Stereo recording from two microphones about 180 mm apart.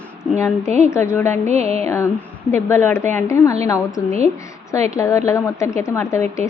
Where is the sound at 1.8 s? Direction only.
15° left (ahead or behind).